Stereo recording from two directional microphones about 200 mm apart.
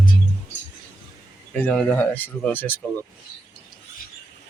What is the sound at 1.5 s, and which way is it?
Speech, 5° left (ahead or behind).